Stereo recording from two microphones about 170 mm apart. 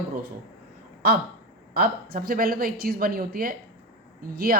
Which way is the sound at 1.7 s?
60° right (ahead or behind).